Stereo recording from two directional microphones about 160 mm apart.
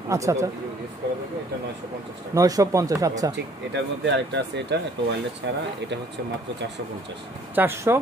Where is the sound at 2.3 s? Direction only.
20° right (ahead or behind).